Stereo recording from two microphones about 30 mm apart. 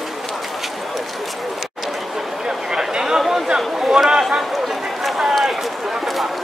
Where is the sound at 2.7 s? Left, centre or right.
Right.